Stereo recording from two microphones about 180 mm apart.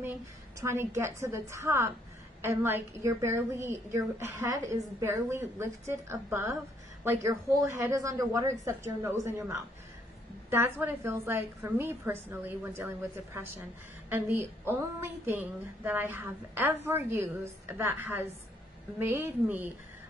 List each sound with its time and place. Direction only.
0.6 s a woman's voice: 15° right (ahead or behind)
10.5 s a woman's voice: 15° right (ahead or behind)
14.0 s a woman's voice: 10° right (ahead or behind)